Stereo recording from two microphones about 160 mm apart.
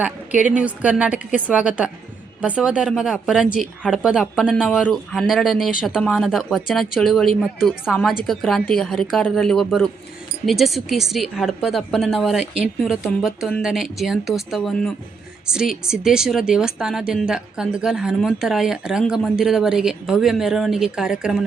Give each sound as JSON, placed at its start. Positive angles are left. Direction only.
{"t": 0.0, "sound": "a woman's voice", "side_deg": -10}